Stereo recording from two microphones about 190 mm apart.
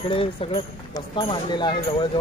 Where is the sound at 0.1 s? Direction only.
30° left (ahead or behind).